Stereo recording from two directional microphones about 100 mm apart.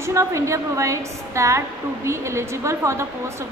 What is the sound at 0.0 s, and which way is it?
A woman's voice, 30° right (ahead or behind).